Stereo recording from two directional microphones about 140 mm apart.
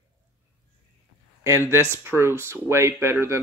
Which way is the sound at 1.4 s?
20° right (ahead or behind).